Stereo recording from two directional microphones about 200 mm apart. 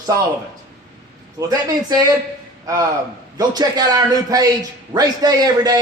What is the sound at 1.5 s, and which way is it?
Speech, 20° right (ahead or behind).